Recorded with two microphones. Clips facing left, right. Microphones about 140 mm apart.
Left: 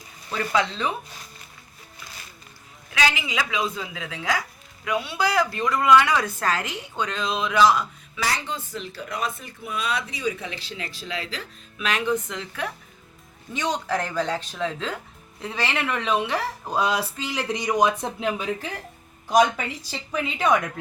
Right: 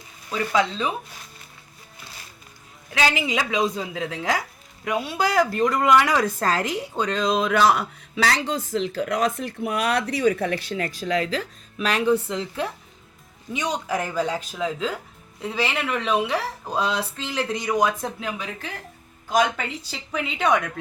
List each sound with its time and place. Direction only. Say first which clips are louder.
0.3 s speech: right 1 dB; 15° right (ahead or behind)
3.1 s speech: right 3 dB; 40° right (ahead or behind); by 10.5 s 55° right (ahead or behind)
10.5 s speech: right 10 dB; 25° left (ahead or behind)
10.8 s speech: right 8 dB; 45° right (ahead or behind); by 12.7 s 30° right (ahead or behind)
13.5 s speech: even; 10° right (ahead or behind); by 18.4 s 25° left (ahead or behind)
19.5 s speech: even; centre (ahead or behind)